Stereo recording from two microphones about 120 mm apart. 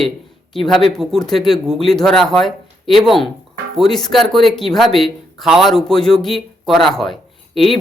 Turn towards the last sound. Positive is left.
turn(degrees=0)  # may be behind; listen again after turning